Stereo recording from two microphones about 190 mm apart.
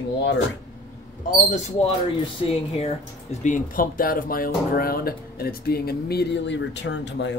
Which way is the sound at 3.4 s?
45° left (ahead or behind).